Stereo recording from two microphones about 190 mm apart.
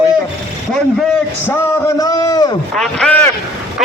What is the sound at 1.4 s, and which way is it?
A man's voice, 15° left (ahead or behind).